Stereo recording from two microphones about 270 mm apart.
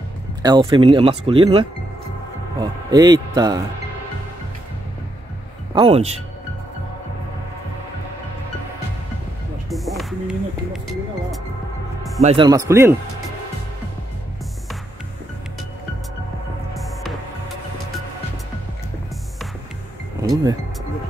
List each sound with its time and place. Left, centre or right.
0.4 s speech: centre
5.8 s speech: right
9.7 s music: centre
12.2 s speech: right
20.2 s music: centre